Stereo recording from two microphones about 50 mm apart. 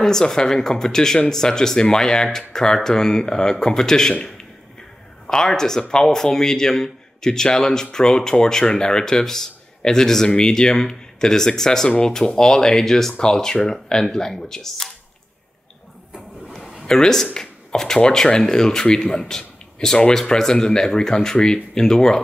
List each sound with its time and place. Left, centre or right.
0.0 s a man's voice: centre
16.8 s speech: centre